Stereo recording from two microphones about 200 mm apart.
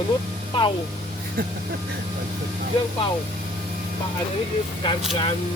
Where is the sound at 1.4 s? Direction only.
45° right (ahead or behind).